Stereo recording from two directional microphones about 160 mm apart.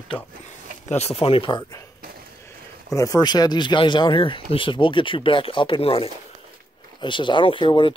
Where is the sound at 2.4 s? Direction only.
20° left (ahead or behind).